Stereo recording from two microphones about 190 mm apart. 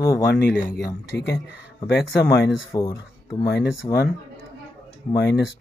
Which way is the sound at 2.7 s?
20° left (ahead or behind).